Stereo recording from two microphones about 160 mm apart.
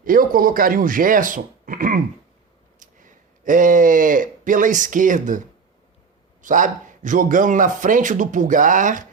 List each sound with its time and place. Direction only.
0.0 s a man's voice: 60° right (ahead or behind)
6.4 s a man's voice: 55° right (ahead or behind)